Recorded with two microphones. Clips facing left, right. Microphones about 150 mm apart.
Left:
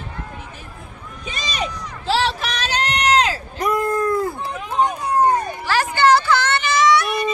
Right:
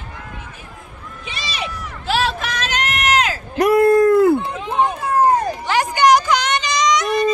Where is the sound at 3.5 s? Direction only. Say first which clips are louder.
Right 10 dB; 90° right.